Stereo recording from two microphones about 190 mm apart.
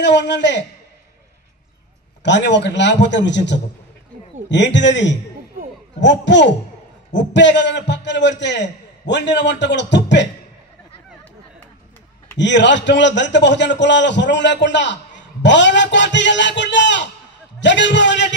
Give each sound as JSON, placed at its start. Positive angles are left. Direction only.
{"t": 0.0, "sound": "a man's voice", "side_deg": 65}
{"t": 2.2, "sound": "a man's voice", "side_deg": 65}
{"t": 12.4, "sound": "a man's voice", "side_deg": 70}